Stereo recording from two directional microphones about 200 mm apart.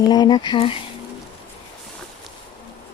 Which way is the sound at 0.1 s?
20° left (ahead or behind).